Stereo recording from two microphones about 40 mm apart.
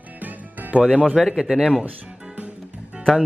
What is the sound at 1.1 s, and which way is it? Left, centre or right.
Speech, centre.